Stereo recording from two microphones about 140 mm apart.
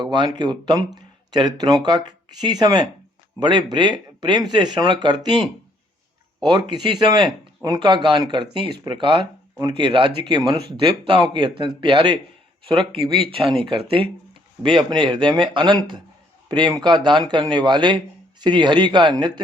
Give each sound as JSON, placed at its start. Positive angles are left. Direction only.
{"t": 0.0, "sound": "speech", "side_deg": -30}
{"t": 6.4, "sound": "speech", "side_deg": -30}